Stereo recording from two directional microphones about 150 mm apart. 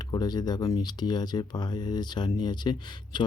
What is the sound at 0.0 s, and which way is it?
Speech, 25° left (ahead or behind).